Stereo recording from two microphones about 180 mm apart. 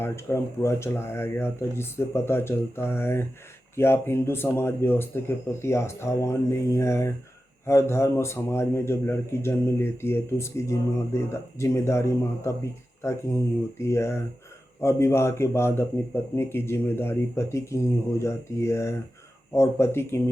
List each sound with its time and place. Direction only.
0.0 s a man's voice: 15° left (ahead or behind)